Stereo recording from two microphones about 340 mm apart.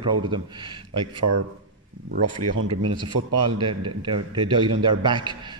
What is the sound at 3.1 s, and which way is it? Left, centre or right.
Speech, right.